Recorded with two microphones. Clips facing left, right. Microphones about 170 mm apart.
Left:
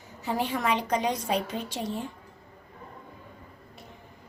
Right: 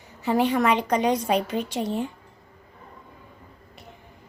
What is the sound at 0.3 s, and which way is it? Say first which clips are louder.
A woman's voice: right 7 dB; 70° right (ahead or behind).